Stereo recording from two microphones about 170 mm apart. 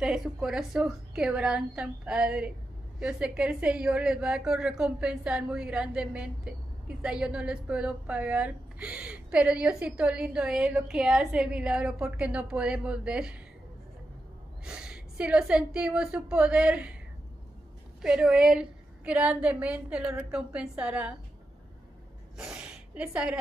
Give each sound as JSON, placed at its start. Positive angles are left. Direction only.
{"t": 0.0, "sound": "a woman's voice", "side_deg": -5}
{"t": 14.6, "sound": "a woman's voice", "side_deg": -5}
{"t": 18.0, "sound": "a woman's voice", "side_deg": -5}
{"t": 22.4, "sound": "a woman's voice", "side_deg": -5}